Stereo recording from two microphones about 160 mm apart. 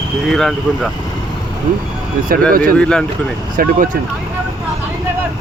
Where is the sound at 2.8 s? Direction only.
5° left (ahead or behind).